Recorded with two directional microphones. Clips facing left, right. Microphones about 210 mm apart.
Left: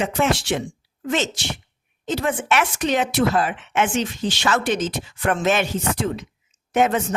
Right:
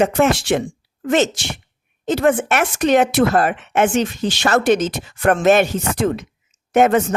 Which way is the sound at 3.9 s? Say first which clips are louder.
Right 5 dB; 60° right (ahead or behind).